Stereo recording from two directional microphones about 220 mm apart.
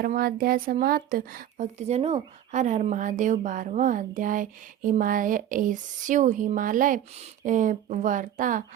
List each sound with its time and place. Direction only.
0.0 s speech: 40° right (ahead or behind)